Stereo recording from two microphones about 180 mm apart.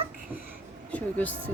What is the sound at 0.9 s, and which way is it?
Speech, 10° left (ahead or behind).